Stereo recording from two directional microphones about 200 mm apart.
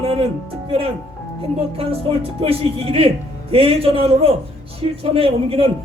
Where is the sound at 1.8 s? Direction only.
30° right (ahead or behind).